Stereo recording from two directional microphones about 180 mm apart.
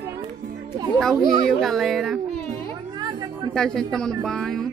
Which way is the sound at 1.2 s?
Centre (ahead or behind).